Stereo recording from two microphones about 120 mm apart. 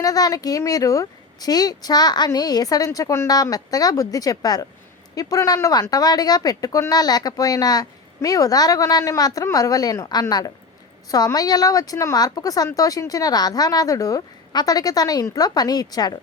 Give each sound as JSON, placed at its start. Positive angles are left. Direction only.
{"t": 0.0, "sound": "speech", "side_deg": 30}